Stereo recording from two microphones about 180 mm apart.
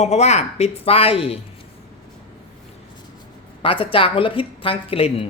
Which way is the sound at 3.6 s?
30° left (ahead or behind).